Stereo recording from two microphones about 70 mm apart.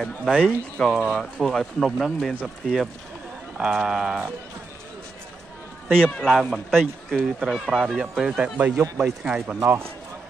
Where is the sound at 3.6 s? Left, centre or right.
Centre.